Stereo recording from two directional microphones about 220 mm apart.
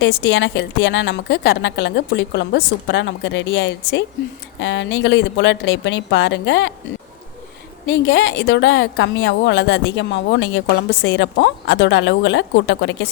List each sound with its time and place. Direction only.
0.0 s a woman's voice: 55° left (ahead or behind)
7.9 s a woman's voice: 55° left (ahead or behind)